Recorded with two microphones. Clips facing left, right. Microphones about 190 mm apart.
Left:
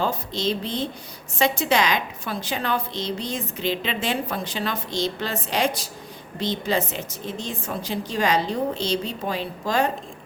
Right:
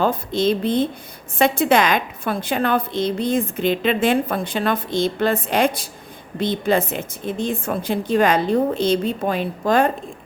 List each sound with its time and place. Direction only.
0.0 s a woman's voice: 55° right (ahead or behind)